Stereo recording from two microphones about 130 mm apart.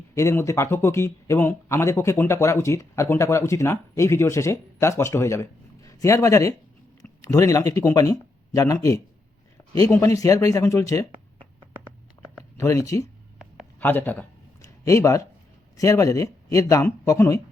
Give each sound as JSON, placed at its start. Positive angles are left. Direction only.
{"t": 0.1, "sound": "speech", "side_deg": 25}
{"t": 10.0, "sound": "speech", "side_deg": 25}
{"t": 12.4, "sound": "speech", "side_deg": 25}
{"t": 13.7, "sound": "speech", "side_deg": 15}
{"t": 14.6, "sound": "speech", "side_deg": 25}